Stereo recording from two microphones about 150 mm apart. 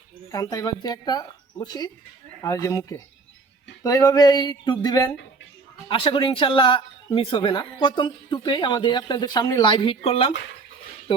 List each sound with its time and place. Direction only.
0.3 s speech: 25° left (ahead or behind)
5.9 s speech: 35° left (ahead or behind)